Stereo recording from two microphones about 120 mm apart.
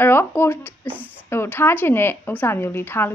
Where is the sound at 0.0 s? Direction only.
20° left (ahead or behind).